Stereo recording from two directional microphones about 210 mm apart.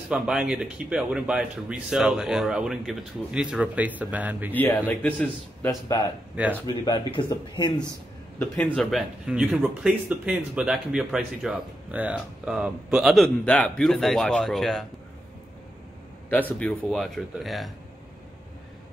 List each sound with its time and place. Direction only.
0.1 s speech: 5° right (ahead or behind)
4.6 s a man's voice: 10° left (ahead or behind)
6.6 s speech: 20° left (ahead or behind)
8.6 s speech: centre (ahead or behind)
16.5 s speech: 5° left (ahead or behind)